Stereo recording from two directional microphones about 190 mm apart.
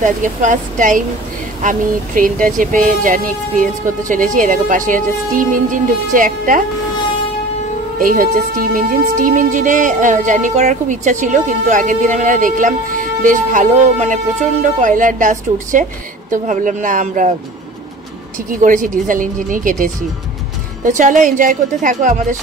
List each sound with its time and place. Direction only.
0.0 s a woman's voice: 40° right (ahead or behind)
8.0 s a woman's voice: 50° right (ahead or behind)
18.6 s a woman's voice: 45° right (ahead or behind)